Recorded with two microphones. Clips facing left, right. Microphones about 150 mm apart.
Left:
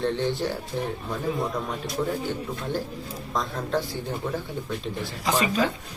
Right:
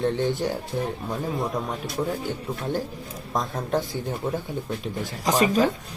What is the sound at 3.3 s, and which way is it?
Speech, 20° right (ahead or behind).